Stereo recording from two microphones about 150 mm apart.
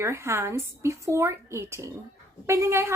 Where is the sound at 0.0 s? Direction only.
15° right (ahead or behind).